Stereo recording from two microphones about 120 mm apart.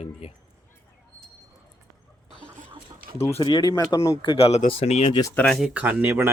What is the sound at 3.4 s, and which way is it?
Speech, 40° left (ahead or behind).